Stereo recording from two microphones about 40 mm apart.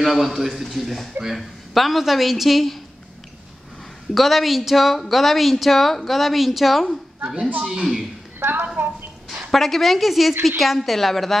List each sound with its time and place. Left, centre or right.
0.0 s speech: centre
4.1 s speech: centre
7.6 s speech: centre
8.4 s a woman's voice: right
9.5 s speech: centre